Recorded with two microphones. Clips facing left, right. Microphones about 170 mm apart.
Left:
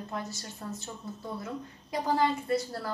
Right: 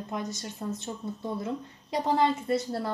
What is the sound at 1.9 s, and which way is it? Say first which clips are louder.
A woman's voice: right 2 dB; 25° right (ahead or behind).